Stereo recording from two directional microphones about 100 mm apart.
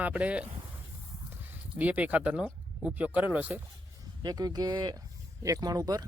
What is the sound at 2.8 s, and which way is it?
Speech, 10° right (ahead or behind).